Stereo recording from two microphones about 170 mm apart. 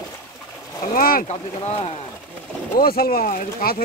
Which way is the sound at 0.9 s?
60° left (ahead or behind).